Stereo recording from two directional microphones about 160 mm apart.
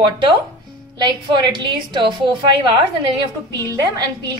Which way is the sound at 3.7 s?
25° right (ahead or behind).